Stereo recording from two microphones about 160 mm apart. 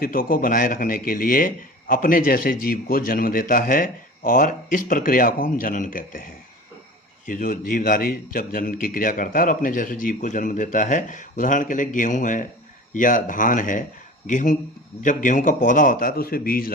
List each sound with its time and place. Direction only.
0.0 s a man's voice: 65° left (ahead or behind)
7.3 s a man's voice: 60° left (ahead or behind)